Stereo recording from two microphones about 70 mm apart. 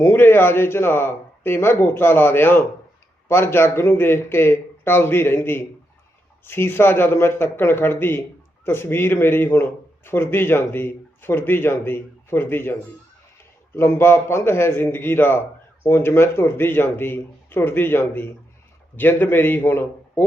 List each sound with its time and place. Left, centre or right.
0.0 s speech: left
13.7 s speech: left